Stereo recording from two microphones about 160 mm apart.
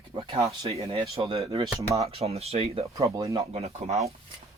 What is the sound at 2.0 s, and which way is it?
Speech, 40° right (ahead or behind).